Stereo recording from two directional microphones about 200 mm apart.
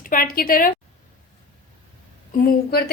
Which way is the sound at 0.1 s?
45° left (ahead or behind).